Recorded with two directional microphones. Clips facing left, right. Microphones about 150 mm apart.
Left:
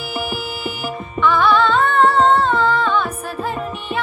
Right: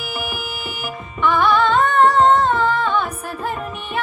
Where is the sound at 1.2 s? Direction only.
15° right (ahead or behind).